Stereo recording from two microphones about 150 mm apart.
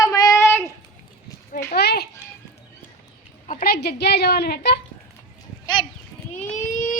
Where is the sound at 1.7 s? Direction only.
90° left.